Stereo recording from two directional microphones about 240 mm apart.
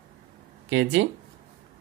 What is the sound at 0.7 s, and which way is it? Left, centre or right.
Speech, right.